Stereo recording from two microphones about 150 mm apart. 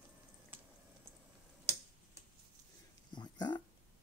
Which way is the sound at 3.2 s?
30° left (ahead or behind).